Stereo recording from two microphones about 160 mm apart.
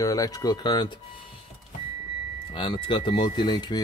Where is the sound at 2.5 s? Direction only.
35° left (ahead or behind).